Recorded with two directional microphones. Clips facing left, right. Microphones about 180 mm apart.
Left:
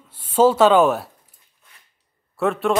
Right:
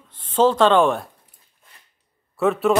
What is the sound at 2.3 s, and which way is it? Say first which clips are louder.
Speech: right 2 dB; centre (ahead or behind).